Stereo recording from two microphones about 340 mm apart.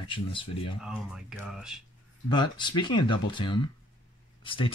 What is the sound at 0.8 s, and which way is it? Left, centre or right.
Speech, centre.